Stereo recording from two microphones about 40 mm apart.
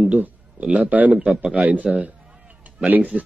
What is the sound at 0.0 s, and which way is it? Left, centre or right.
A man's voice, right.